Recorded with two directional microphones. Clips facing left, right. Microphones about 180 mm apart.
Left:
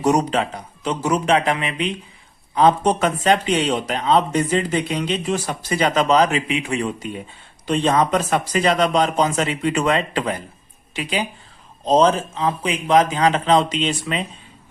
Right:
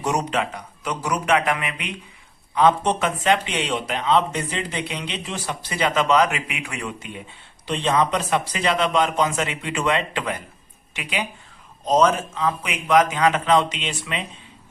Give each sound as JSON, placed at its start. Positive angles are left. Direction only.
{"t": 0.0, "sound": "a man's voice", "side_deg": 35}
{"t": 7.7, "sound": "a man's voice", "side_deg": 45}